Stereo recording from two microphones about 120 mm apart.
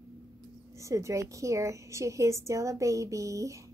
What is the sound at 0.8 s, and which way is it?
A woman's voice, 25° right (ahead or behind).